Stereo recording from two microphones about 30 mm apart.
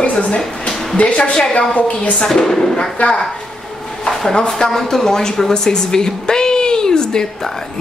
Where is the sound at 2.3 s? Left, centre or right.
Centre.